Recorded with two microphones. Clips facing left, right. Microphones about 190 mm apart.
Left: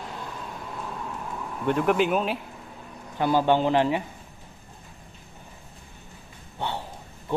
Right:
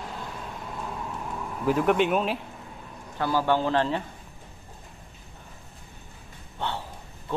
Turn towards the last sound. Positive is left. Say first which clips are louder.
# left 1 dB
turn(degrees=15)  # may be behind; listen again after turning